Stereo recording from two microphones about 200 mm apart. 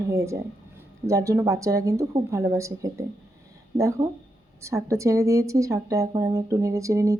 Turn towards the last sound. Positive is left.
turn(degrees=-15)  # may be behind; listen again after turning